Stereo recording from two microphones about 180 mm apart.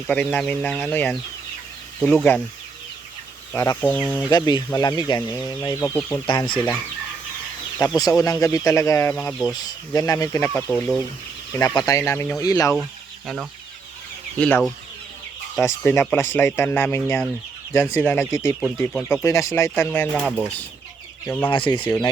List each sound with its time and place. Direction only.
0.1 s speech: 5° left (ahead or behind)
3.5 s speech: 10° left (ahead or behind)
4.3 s speech: 20° left (ahead or behind)
6.2 s speech: 25° left (ahead or behind)
7.9 s speech: 20° left (ahead or behind)
11.5 s speech: 20° left (ahead or behind)
12.7 s speech: centre (ahead or behind)
14.3 s speech: 5° left (ahead or behind)
20.1 s speech: 5° right (ahead or behind)
21.2 s speech: 10° left (ahead or behind)
21.5 s speech: 25° left (ahead or behind)